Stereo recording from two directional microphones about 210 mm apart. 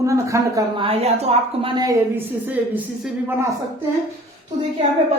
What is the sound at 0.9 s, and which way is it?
A woman's voice, 30° right (ahead or behind).